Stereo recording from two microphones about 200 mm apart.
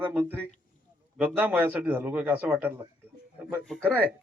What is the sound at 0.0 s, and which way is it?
A man's voice, 10° right (ahead or behind).